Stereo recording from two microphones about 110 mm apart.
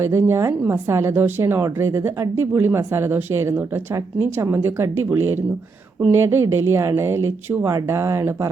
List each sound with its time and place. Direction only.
0.0 s a woman's voice: 25° right (ahead or behind)